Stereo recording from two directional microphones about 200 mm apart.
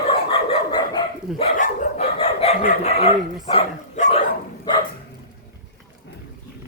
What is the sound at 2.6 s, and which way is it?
Speech, 35° left (ahead or behind).